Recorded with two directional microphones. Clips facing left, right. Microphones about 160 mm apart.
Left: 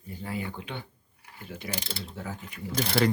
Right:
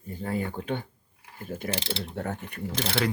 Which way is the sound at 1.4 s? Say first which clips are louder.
Right 6 dB; 50° right (ahead or behind).